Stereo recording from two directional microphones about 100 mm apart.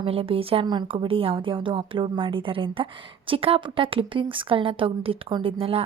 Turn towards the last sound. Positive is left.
turn(degrees=-70)  # may be behind; listen again after turning